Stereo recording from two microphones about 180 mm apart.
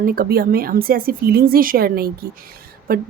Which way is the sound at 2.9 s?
50° right (ahead or behind).